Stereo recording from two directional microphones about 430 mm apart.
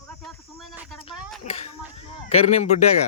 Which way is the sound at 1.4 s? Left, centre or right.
Centre.